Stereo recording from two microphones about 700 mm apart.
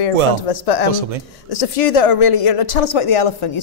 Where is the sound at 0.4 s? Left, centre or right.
Left.